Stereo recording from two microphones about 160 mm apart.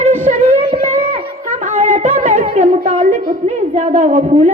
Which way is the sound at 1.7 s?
45° right (ahead or behind).